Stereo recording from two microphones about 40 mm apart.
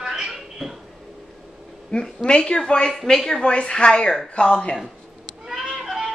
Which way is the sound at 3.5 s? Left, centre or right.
Left.